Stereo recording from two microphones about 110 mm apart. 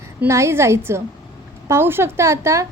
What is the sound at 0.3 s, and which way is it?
A woman's voice, 25° right (ahead or behind).